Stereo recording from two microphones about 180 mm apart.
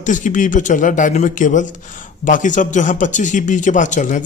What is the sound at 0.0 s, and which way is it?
Speech, 45° left (ahead or behind).